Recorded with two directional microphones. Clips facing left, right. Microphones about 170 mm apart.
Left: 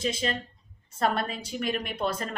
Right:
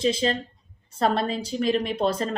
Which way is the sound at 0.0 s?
30° right (ahead or behind).